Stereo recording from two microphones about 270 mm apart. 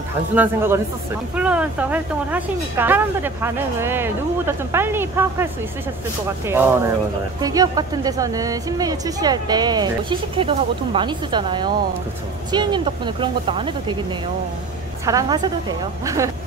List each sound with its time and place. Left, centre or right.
0.3 s speech: centre
15.0 s speech: centre